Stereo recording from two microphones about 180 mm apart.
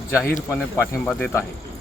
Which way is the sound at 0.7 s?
10° left (ahead or behind).